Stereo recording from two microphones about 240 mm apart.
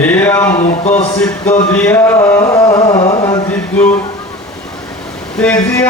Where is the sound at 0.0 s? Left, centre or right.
Centre.